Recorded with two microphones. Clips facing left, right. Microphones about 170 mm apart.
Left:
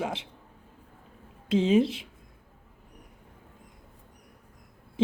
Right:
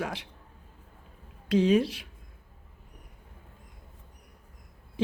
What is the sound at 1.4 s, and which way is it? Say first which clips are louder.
Speech: left 1 dB; 25° left (ahead or behind).